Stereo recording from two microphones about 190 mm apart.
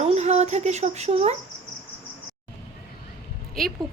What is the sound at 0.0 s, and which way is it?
Speech, 35° right (ahead or behind).